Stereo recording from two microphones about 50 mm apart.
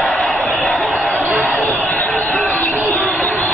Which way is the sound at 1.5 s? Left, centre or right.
Left.